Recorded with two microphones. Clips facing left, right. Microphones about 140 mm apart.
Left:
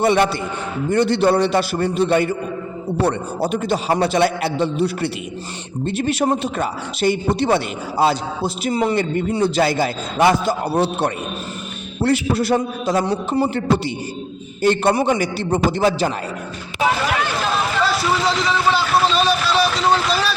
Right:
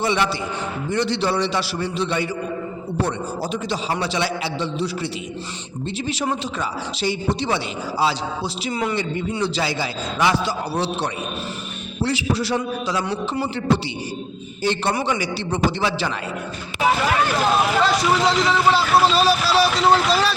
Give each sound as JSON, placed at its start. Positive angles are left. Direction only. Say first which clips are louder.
{"t": 0.0, "sound": "a man's voice", "louder": "left 5 dB", "side_deg": 55}
{"t": 6.0, "sound": "a man's voice", "louder": "left 6 dB", "side_deg": 55}
{"t": 8.7, "sound": "a man's voice", "louder": "left 5 dB", "side_deg": 35}
{"t": 9.0, "sound": "a man's voice", "louder": "left 5 dB", "side_deg": 50}
{"t": 13.1, "sound": "a man's voice", "louder": "left 5 dB", "side_deg": 35}
{"t": 14.6, "sound": "a man's voice", "louder": "left 6 dB", "side_deg": 50}
{"t": 17.9, "sound": "speech", "louder": "right 1 dB", "side_deg": 0}